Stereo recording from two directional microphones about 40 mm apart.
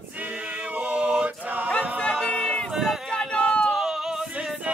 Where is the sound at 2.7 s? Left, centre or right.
Centre.